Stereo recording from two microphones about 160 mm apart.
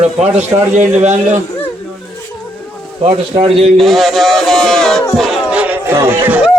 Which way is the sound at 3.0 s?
35° right (ahead or behind).